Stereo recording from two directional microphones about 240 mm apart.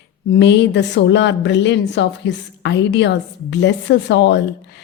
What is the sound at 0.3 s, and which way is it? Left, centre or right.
A woman's voice, left.